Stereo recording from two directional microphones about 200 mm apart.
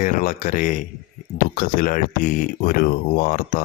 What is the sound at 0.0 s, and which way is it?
Speech, 40° left (ahead or behind).